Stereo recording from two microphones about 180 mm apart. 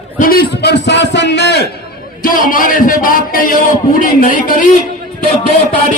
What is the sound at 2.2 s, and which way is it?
A man's voice, 50° left (ahead or behind).